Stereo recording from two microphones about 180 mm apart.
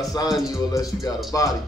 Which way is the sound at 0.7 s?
20° left (ahead or behind).